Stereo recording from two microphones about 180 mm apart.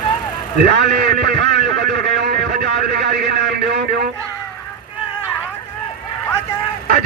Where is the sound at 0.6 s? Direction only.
65° right (ahead or behind).